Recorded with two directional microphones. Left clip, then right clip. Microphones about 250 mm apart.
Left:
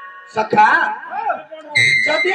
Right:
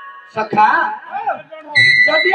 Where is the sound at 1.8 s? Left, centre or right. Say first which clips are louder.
Right 4 dB; centre.